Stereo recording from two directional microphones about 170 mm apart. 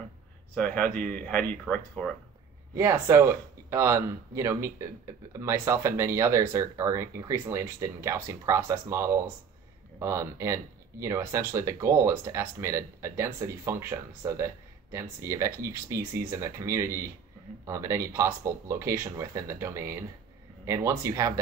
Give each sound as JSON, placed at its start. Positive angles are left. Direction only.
{"t": 0.6, "sound": "speech", "side_deg": 5}
{"t": 2.7, "sound": "speech", "side_deg": -15}